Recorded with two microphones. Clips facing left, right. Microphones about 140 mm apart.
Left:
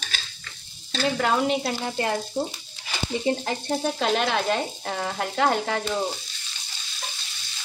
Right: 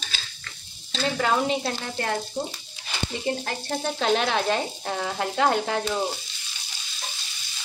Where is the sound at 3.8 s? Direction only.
5° left (ahead or behind).